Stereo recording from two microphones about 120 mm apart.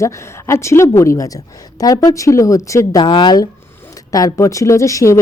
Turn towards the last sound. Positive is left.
turn(degrees=25)  # may be behind; listen again after turning